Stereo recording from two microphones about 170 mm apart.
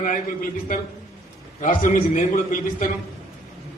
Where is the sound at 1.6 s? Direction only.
50° left (ahead or behind).